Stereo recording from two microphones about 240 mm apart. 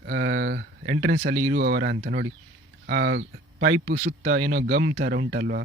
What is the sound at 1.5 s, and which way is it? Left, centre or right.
Speech, right.